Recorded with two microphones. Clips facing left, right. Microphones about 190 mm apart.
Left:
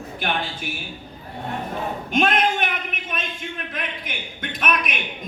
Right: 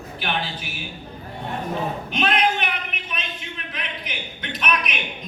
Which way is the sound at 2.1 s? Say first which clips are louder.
Left 3 dB; 45° left (ahead or behind).